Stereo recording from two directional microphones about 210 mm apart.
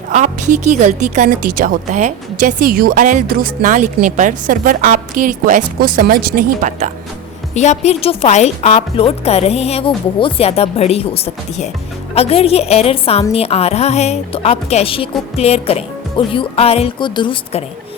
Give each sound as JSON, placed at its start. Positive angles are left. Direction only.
{"t": 0.1, "sound": "a woman's voice", "side_deg": -35}
{"t": 7.5, "sound": "a woman's voice", "side_deg": 35}